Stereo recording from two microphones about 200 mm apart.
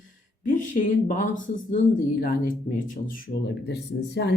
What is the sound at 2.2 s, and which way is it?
A woman's voice, 45° left (ahead or behind).